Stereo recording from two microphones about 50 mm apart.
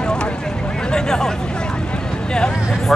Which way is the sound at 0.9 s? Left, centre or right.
Centre.